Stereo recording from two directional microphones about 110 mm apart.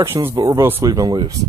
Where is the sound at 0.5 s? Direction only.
20° right (ahead or behind).